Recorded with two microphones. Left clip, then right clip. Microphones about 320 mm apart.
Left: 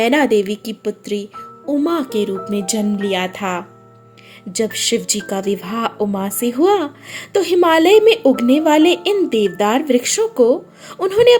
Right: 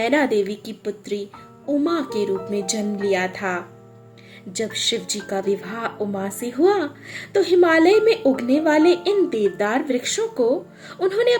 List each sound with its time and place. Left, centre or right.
0.0 s speech: left
2.5 s speech: left
2.7 s speech: left
5.0 s speech: centre
5.5 s speech: left